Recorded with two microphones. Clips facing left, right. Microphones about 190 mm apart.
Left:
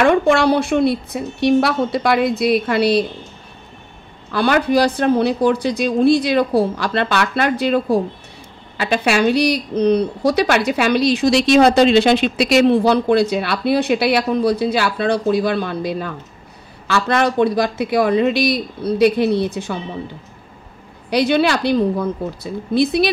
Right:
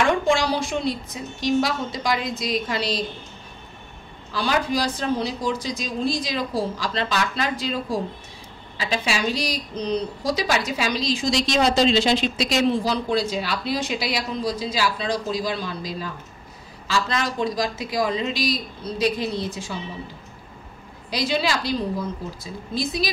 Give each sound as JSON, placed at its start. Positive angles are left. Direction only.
{"t": 0.0, "sound": "speech", "side_deg": 60}
{"t": 4.3, "sound": "speech", "side_deg": 65}
{"t": 21.1, "sound": "speech", "side_deg": 60}